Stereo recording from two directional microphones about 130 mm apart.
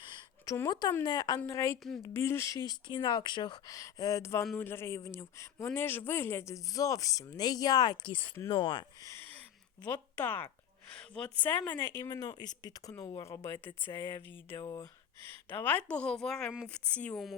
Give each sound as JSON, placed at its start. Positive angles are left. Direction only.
{"t": 0.4, "sound": "a woman's voice", "side_deg": 20}
{"t": 0.7, "sound": "a woman's voice", "side_deg": 30}
{"t": 1.4, "sound": "a woman's voice", "side_deg": 20}
{"t": 9.0, "sound": "a woman's voice", "side_deg": 20}